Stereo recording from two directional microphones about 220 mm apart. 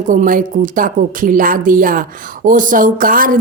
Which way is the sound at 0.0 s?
35° right (ahead or behind).